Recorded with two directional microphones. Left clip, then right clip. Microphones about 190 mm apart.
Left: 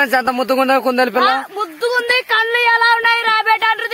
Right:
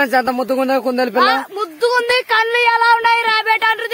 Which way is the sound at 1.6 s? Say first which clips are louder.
Right 2 dB; 25° right (ahead or behind).